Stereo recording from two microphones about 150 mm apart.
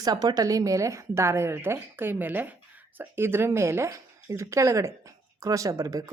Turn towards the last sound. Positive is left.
turn(degrees=-25)  # may be behind; listen again after turning